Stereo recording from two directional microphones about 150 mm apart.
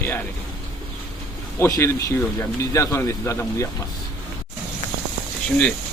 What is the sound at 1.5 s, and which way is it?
Speech, 20° left (ahead or behind).